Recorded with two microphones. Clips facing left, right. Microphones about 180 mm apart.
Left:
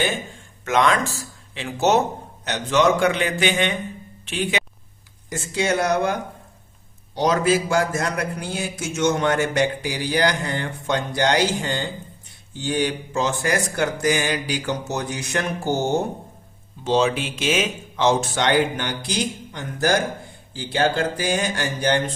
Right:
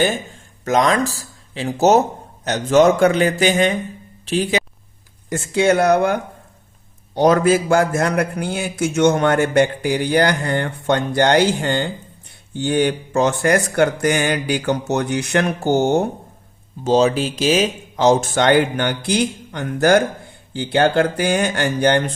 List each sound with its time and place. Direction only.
0.6 s a man's voice: 40° right (ahead or behind)
5.3 s a man's voice: 55° right (ahead or behind)
7.2 s a man's voice: 55° right (ahead or behind)
16.8 s a man's voice: 40° right (ahead or behind); by 21.9 s 60° right (ahead or behind)